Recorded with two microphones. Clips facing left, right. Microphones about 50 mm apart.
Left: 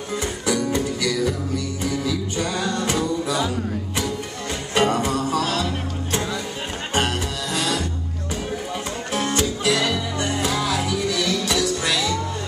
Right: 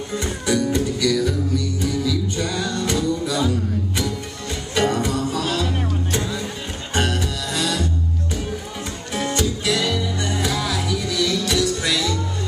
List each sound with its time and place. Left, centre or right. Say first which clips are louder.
0.2 s music: right 2 dB; left
6.9 s music: right 1 dB; left
9.1 s music: even; left